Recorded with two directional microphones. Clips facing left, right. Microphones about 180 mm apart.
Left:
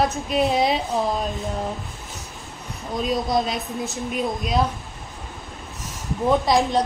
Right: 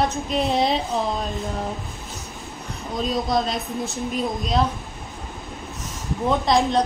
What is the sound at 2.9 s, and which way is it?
Female singing, centre (ahead or behind).